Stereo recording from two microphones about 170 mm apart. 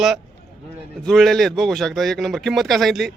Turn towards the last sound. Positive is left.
turn(degrees=0)  # may be behind; listen again after turning